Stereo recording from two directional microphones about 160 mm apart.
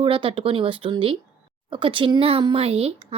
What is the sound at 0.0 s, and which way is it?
Speech, 35° right (ahead or behind).